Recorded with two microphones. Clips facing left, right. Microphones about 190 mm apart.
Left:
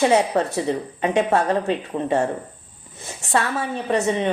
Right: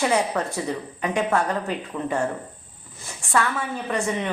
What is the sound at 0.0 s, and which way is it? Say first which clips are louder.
A woman's voice: left 5 dB; 25° left (ahead or behind).